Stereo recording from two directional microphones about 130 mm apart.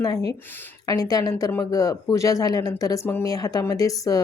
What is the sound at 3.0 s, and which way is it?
Speech, 15° left (ahead or behind).